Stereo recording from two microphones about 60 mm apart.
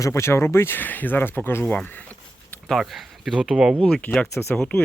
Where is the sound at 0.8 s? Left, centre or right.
Left.